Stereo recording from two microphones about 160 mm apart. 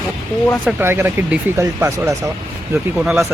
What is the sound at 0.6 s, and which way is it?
Speech, 15° right (ahead or behind).